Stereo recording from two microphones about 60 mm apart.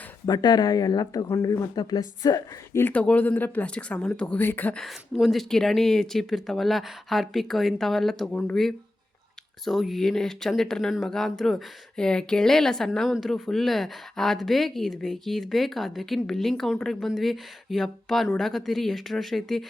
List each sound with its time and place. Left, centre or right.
0.3 s speech: left
1.3 s speech: left
2.9 s speech: left
4.4 s speech: left
5.2 s speech: centre
9.6 s a woman's voice: centre